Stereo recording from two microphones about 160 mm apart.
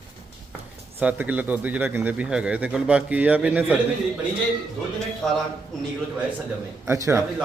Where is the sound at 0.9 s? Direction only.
10° right (ahead or behind).